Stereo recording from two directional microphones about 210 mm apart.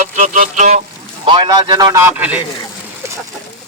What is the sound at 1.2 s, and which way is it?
A man's voice, 20° right (ahead or behind).